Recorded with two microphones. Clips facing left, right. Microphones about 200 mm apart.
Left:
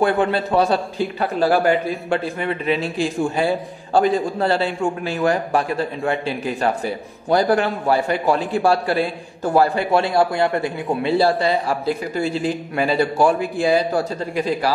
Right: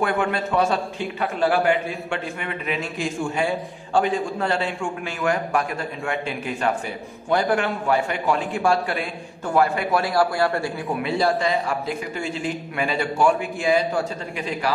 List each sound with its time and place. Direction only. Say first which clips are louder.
0.0 s a man's voice: left 5 dB; 35° left (ahead or behind)